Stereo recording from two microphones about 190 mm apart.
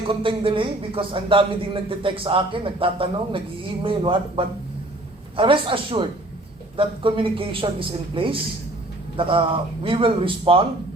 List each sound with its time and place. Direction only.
0.1 s speech: 25° right (ahead or behind)